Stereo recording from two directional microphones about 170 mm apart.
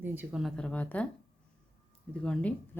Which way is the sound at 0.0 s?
10° right (ahead or behind).